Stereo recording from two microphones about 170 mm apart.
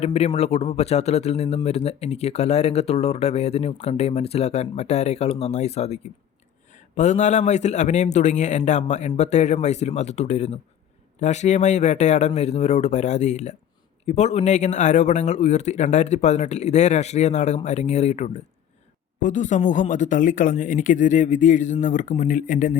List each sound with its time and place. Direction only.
0.0 s speech: 40° left (ahead or behind)